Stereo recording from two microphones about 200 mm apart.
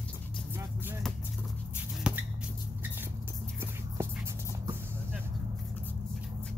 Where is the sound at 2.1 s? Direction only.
5° right (ahead or behind).